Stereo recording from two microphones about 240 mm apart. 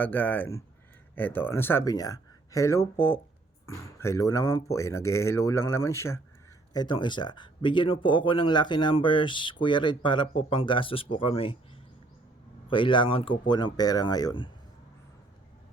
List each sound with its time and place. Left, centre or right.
0.0 s speech: centre; by 11.5 s left
12.6 s speech: left